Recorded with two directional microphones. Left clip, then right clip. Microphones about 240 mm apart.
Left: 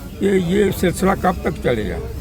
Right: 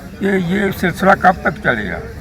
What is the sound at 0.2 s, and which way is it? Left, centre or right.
A man's voice, centre.